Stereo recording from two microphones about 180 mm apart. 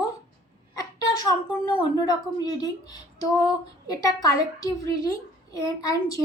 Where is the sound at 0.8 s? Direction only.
25° left (ahead or behind).